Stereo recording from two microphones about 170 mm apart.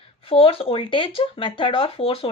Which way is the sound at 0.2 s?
35° left (ahead or behind).